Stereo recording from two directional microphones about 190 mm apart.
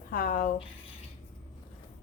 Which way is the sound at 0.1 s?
45° left (ahead or behind).